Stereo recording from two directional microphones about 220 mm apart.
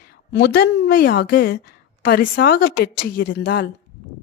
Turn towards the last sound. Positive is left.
turn(degrees=45)  # may be behind; listen again after turning